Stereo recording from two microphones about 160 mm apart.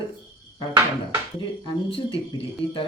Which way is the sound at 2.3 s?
30° left (ahead or behind).